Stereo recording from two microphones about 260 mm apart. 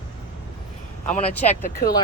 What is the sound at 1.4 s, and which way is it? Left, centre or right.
Speech, left.